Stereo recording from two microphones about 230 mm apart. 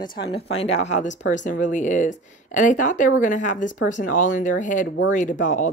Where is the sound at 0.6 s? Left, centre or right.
Left.